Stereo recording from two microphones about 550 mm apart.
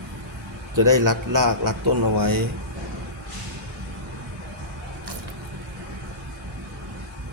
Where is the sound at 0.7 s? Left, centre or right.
Right.